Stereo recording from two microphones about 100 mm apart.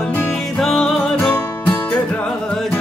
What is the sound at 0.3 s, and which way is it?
Music, 5° left (ahead or behind).